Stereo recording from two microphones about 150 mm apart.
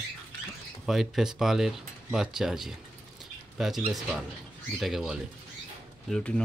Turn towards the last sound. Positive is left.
turn(degrees=5)  # may be behind; listen again after turning